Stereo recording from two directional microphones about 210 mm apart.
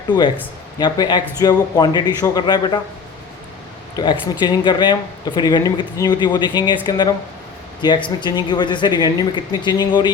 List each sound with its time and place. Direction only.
0.8 s speech: 20° left (ahead or behind)
3.9 s speech: 20° left (ahead or behind)